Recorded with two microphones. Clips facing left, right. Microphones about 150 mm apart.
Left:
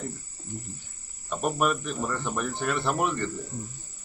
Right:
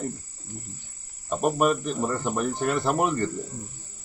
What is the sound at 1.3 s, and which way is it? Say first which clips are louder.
Speech: right 4 dB; 35° right (ahead or behind).